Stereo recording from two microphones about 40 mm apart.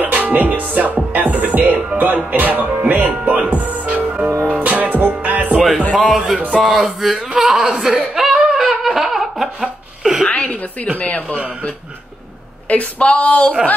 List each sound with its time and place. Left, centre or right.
0.0 s music: right
2.0 s speech: right
3.4 s music: right
4.0 s music: right
5.9 s music: centre
6.5 s speech: centre
8.1 s laughter: centre
10.3 s a sound: left
11.0 s speech: left
12.6 s speech: left